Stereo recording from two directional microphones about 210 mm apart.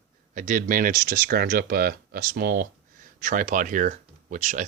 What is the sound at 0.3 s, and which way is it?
Speech, 40° right (ahead or behind).